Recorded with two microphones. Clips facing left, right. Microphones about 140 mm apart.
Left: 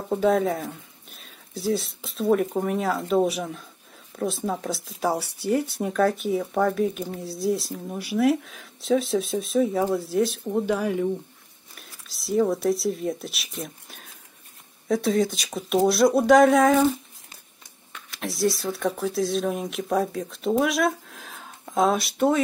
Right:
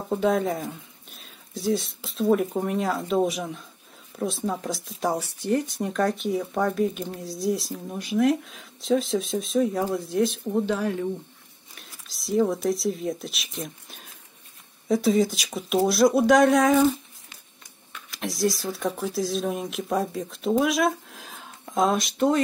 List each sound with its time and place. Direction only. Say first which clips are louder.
0.1 s speech: left 2 dB; centre (ahead or behind)
18.1 s speech: left 1 dB; centre (ahead or behind)